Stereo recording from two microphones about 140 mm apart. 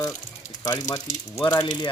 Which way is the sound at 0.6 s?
25° left (ahead or behind).